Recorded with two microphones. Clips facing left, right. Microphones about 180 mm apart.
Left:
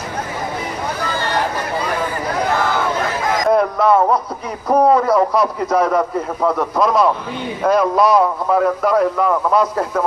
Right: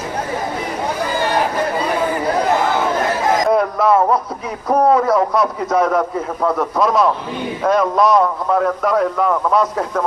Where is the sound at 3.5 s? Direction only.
Centre (ahead or behind).